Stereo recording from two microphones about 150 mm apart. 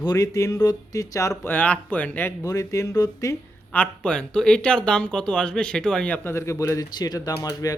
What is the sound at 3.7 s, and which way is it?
Speech, 10° left (ahead or behind).